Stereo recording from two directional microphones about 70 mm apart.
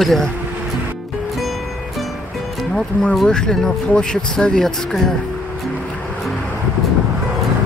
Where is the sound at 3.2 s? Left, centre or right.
Centre.